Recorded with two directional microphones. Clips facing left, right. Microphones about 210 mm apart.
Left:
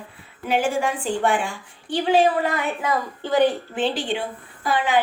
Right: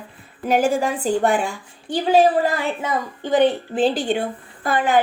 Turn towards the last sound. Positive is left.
turn(degrees=-50)  # may be behind; listen again after turning